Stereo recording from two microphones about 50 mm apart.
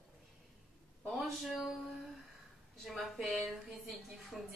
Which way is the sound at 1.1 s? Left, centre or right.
Centre.